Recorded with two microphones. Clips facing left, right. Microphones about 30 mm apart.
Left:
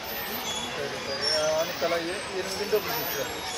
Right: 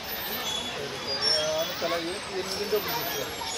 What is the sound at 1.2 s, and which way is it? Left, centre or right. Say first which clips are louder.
Vehicle: even; right.